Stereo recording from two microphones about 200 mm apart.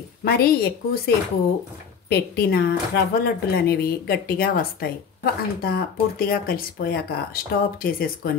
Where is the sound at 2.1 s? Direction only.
50° left (ahead or behind).